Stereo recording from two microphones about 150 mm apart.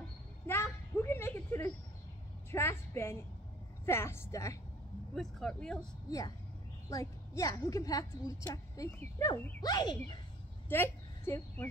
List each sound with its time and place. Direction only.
0.5 s a sound: 15° left (ahead or behind)
2.5 s vehicle: 15° left (ahead or behind)
3.8 s a woman's voice: 15° left (ahead or behind)
5.1 s speech: 5° left (ahead or behind)
6.0 s a woman's voice: 25° left (ahead or behind)
10.7 s a woman's voice: 15° left (ahead or behind)